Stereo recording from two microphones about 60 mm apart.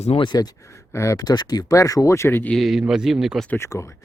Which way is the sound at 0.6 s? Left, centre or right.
Left.